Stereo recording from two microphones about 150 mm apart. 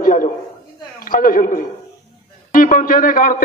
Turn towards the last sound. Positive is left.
turn(degrees=65)  # may be behind; listen again after turning